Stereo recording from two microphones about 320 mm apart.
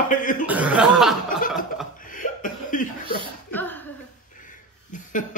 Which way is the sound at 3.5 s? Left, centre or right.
Centre.